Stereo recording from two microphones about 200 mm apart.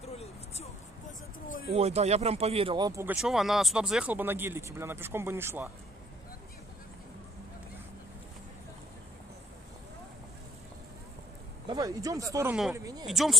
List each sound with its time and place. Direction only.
0.0 s a sound: 30° left (ahead or behind)
1.7 s speech: 30° right (ahead or behind); by 3.2 s 15° right (ahead or behind)
3.2 s speech: centre (ahead or behind)
11.7 s speech: 15° right (ahead or behind)
13.0 s speech: centre (ahead or behind)